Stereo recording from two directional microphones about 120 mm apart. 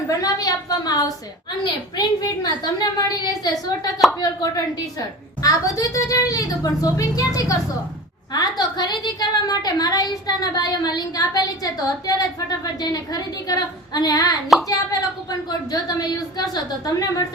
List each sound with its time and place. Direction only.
0.1 s a woman's voice: 30° left (ahead or behind)